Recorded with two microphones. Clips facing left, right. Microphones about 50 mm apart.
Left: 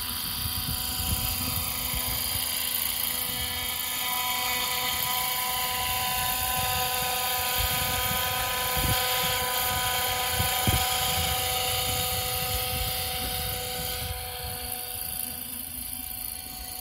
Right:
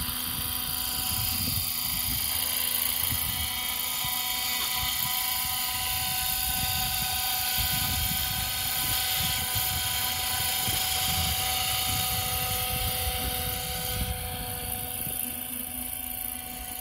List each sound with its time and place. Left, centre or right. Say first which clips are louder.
0.9 s vehicle: even; centre
2.2 s a sound: even; centre
4.0 s mains hum: left 7 dB; left
4.6 s vehicle: left 3 dB; centre